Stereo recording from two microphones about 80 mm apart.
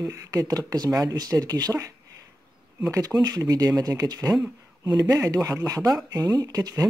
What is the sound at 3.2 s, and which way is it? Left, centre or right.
Speech, right.